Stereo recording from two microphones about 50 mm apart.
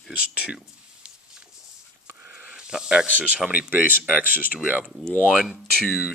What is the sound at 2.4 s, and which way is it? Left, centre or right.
Snake, centre.